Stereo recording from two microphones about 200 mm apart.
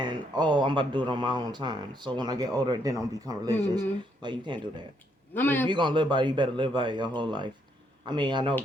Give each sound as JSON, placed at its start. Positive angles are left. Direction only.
{"t": 0.0, "sound": "speech", "side_deg": -20}
{"t": 5.3, "sound": "a man's voice", "side_deg": 10}
{"t": 5.6, "sound": "speech", "side_deg": -25}